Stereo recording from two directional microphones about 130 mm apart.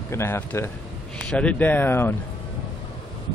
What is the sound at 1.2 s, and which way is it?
Speech, 10° left (ahead or behind).